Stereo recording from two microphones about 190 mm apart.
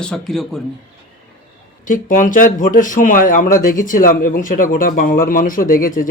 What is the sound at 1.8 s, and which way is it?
Speech, 45° left (ahead or behind).